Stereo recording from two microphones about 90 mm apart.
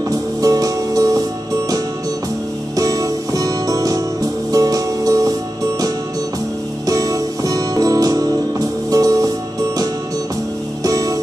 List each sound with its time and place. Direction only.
0.4 s music: 40° right (ahead or behind)
2.7 s music: 40° right (ahead or behind)
6.9 s music: 45° right (ahead or behind)